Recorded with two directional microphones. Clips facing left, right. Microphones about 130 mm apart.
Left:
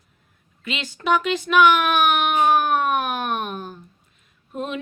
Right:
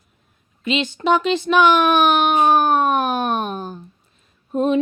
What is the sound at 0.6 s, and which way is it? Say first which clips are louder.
Speech: right 5 dB; 25° right (ahead or behind).